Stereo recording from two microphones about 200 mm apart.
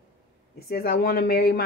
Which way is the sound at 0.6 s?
50° left (ahead or behind).